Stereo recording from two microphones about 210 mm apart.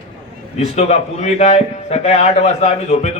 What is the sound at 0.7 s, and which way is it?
A man's voice, 30° left (ahead or behind).